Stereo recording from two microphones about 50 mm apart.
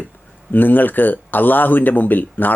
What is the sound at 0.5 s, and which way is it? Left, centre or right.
Speech, left.